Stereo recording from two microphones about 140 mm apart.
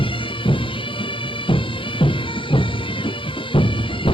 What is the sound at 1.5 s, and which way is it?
Music, 35° left (ahead or behind).